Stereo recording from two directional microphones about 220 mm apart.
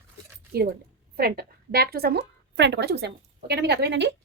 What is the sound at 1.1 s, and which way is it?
A woman's voice, 45° right (ahead or behind).